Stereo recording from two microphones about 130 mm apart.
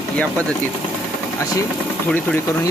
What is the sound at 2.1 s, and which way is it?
Speech, 15° left (ahead or behind).